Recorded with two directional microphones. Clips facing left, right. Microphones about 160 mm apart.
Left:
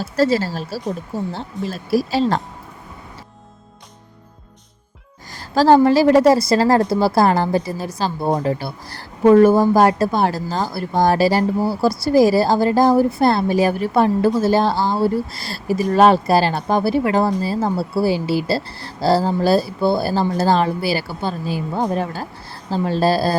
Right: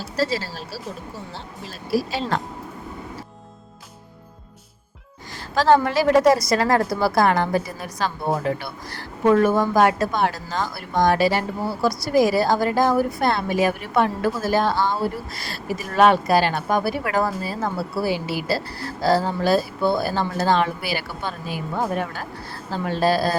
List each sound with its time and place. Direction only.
0.0 s speech: 50° left (ahead or behind)
2.0 s speech: 35° left (ahead or behind)
5.5 s speech: 35° left (ahead or behind)